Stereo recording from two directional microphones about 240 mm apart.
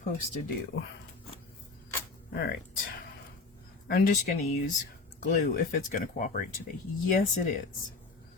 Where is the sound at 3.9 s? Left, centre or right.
Left.